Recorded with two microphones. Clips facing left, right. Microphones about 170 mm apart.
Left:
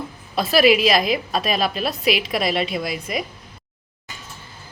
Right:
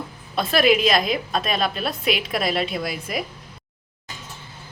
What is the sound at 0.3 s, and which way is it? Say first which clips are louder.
A woman's voice: left 2 dB; 5° left (ahead or behind).